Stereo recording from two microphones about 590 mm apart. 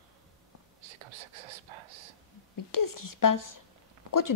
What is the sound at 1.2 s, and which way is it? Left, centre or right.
Whispering, right.